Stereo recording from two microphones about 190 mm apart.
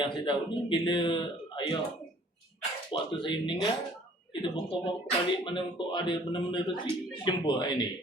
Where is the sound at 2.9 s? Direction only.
25° left (ahead or behind).